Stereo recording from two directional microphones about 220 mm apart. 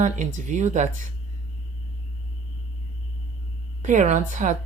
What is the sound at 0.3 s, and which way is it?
Speech, 35° right (ahead or behind).